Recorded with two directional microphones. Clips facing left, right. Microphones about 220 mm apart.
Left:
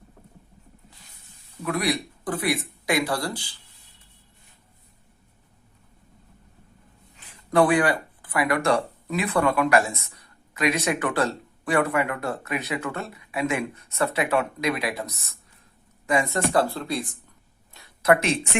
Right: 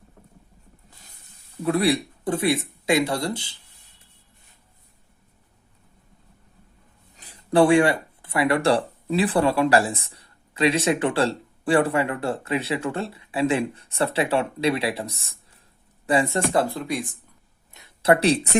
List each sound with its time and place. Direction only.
1.6 s speech: 30° right (ahead or behind)
7.2 s speech: 35° right (ahead or behind); by 17.1 s 15° right (ahead or behind)
17.7 s speech: 25° right (ahead or behind)